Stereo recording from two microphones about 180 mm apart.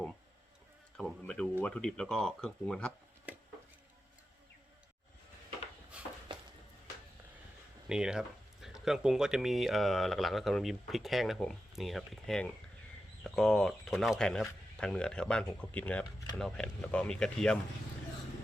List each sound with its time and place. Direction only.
0.9 s speech: 5° left (ahead or behind)
6.3 s music: 25° right (ahead or behind)
7.9 s speech: 5° right (ahead or behind)